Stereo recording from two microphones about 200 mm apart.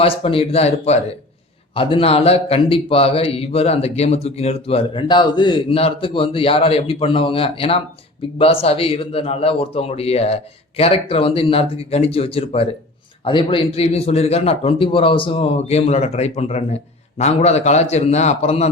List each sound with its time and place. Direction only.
0.0 s a man's voice: 30° left (ahead or behind)